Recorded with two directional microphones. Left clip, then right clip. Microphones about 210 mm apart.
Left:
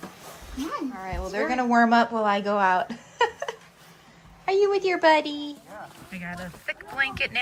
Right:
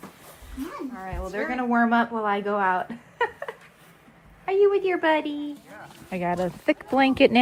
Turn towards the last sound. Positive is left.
turn(degrees=-20)  # may be behind; listen again after turning